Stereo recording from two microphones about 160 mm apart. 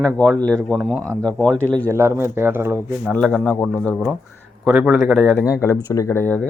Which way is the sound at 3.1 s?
5° left (ahead or behind).